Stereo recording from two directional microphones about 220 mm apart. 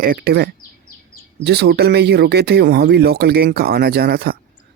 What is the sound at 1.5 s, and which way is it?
Speech, 45° right (ahead or behind).